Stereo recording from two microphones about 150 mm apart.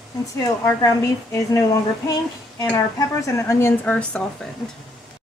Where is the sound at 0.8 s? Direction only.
20° left (ahead or behind).